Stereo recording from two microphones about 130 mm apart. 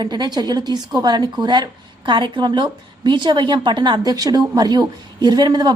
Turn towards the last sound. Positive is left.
turn(degrees=-30)  # may be behind; listen again after turning